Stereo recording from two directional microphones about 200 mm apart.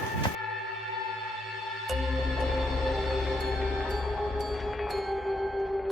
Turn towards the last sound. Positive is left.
turn(degrees=0)  # may be behind; listen again after turning